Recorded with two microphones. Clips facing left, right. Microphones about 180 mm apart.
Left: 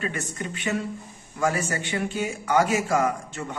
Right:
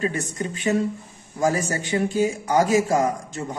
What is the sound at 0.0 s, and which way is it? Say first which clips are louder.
A man's voice: right 5 dB; 35° right (ahead or behind).